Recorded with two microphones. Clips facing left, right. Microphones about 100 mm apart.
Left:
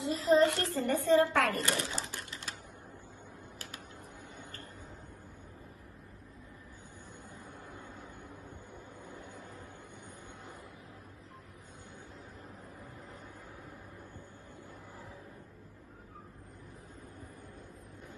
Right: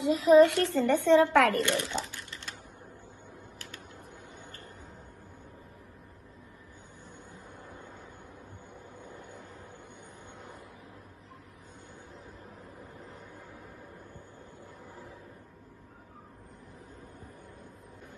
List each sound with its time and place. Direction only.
0.0 s a woman's voice: 85° right
1.6 s a child's voice: 35° left (ahead or behind)